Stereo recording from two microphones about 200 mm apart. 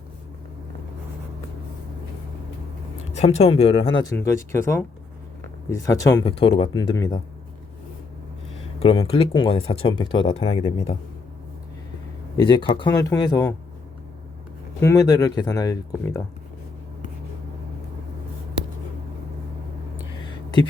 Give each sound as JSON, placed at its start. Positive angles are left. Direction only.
{"t": 3.2, "sound": "speech", "side_deg": 30}
{"t": 8.8, "sound": "speech", "side_deg": 30}
{"t": 12.4, "sound": "speech", "side_deg": 25}
{"t": 14.8, "sound": "speech", "side_deg": 15}